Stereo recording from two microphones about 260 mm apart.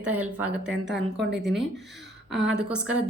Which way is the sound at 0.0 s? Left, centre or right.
Centre.